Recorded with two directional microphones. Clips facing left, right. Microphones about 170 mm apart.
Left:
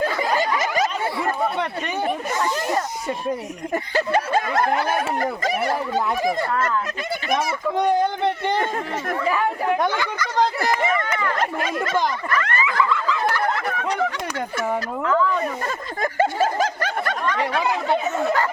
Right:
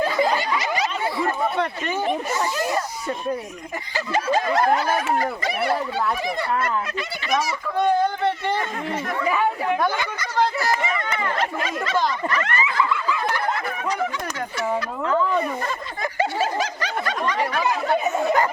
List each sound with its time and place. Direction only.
0.0 s a sound: 45° left (ahead or behind)
3.9 s speech: 55° left (ahead or behind)
9.2 s speech: centre (ahead or behind)
10.6 s run: 55° left (ahead or behind)
11.3 s speech: 50° left (ahead or behind)
12.3 s snicker: 25° right (ahead or behind)
12.9 s a sound: 15° right (ahead or behind)
15.0 s snicker: 20° right (ahead or behind)
16.0 s snicker: 50° left (ahead or behind)
17.5 s speech: 25° left (ahead or behind)